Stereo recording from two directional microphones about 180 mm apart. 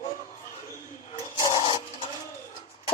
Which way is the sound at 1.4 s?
25° left (ahead or behind).